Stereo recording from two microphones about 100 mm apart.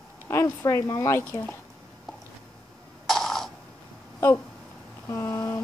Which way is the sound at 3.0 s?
Centre (ahead or behind).